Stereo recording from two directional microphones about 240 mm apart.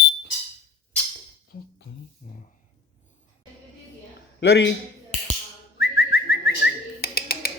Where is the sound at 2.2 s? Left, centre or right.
Left.